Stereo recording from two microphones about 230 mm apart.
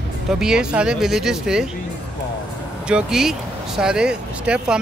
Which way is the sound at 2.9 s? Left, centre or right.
Centre.